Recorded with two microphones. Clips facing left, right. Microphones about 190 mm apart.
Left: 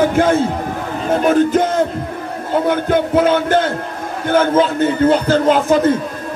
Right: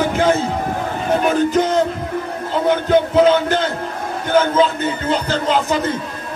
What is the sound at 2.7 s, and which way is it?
A man's voice, 50° left (ahead or behind).